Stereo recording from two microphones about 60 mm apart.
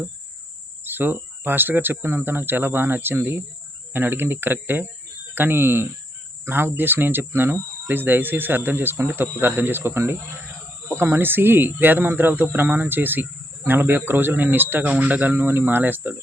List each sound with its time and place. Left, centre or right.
0.9 s speech: right